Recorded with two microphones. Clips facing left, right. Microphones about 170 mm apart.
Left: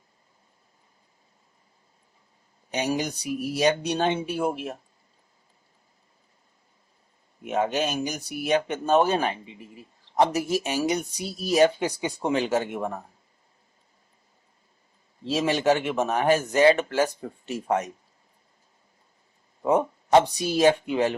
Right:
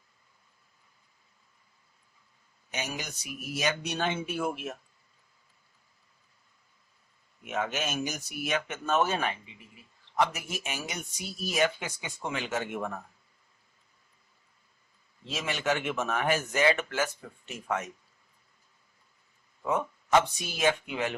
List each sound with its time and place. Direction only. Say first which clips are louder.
2.6 s speech: left 10 dB; 35° left (ahead or behind)
7.4 s speech: left 7 dB; 35° left (ahead or behind)
15.3 s speech: left 9 dB; 35° left (ahead or behind)
19.6 s speech: left 8 dB; 35° left (ahead or behind)